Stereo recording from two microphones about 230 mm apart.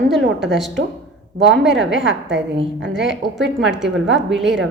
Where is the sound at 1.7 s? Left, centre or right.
Right.